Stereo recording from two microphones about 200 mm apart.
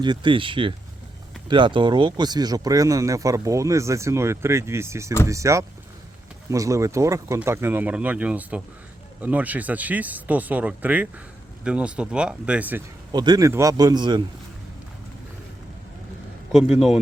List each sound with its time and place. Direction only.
0.0 s speech: 20° right (ahead or behind)
13.1 s speech: 20° right (ahead or behind)
16.5 s speech: 5° right (ahead or behind)